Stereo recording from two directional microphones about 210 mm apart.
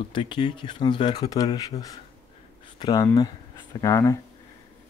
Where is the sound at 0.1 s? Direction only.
25° left (ahead or behind).